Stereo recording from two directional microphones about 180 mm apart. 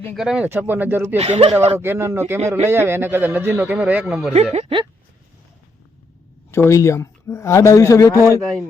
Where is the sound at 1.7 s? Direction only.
15° right (ahead or behind).